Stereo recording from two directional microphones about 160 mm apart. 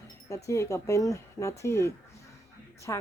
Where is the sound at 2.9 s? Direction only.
20° left (ahead or behind).